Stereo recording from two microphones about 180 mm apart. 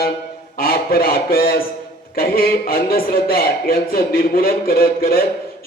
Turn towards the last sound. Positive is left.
turn(degrees=55)  # may be behind; listen again after turning